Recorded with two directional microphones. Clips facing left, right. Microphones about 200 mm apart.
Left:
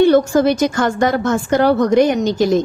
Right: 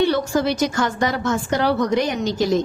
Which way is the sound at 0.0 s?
50° left (ahead or behind).